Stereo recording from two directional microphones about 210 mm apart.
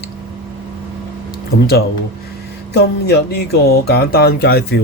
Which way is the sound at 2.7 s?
50° left (ahead or behind).